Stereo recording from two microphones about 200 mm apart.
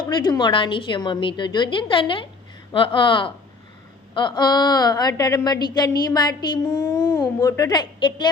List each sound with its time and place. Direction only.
0.0 s a woman's voice: 20° left (ahead or behind)